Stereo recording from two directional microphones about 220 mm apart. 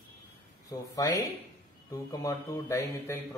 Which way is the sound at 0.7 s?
15° left (ahead or behind).